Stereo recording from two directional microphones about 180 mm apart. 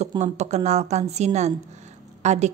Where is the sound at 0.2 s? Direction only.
40° right (ahead or behind).